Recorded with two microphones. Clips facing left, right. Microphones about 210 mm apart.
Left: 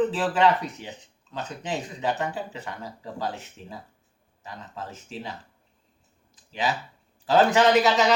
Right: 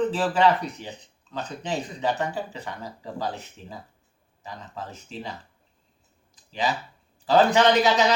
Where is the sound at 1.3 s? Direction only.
5° left (ahead or behind).